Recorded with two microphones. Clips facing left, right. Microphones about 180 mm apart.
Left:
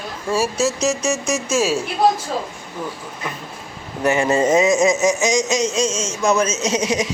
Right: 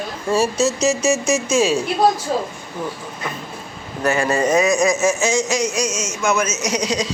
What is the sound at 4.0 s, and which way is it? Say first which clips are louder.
A man's voice: left 1 dB; 20° left (ahead or behind).